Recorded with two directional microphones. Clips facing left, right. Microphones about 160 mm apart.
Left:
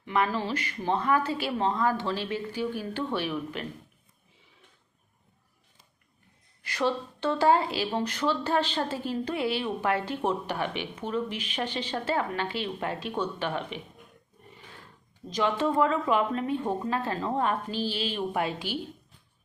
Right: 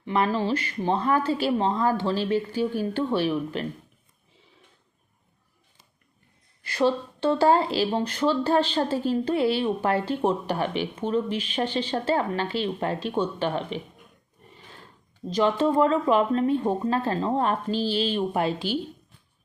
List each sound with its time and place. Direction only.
0.0 s speech: 30° right (ahead or behind)
6.7 s speech: 30° right (ahead or behind)
15.3 s speech: 30° right (ahead or behind)